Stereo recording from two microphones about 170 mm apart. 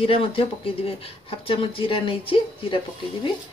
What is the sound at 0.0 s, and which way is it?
Speech, 35° left (ahead or behind).